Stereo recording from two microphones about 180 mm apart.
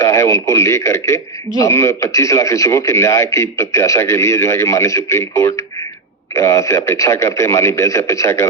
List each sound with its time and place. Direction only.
0.0 s speech: 15° left (ahead or behind)